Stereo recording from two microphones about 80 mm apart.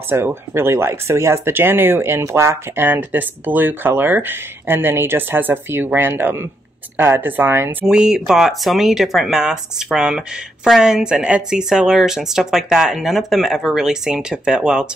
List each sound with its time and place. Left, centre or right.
0.1 s speech: right
7.8 s speech: centre